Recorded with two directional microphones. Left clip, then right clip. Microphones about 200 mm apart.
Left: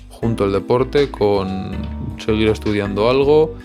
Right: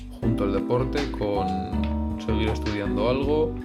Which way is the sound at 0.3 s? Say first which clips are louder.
Left 8 dB; 50° left (ahead or behind).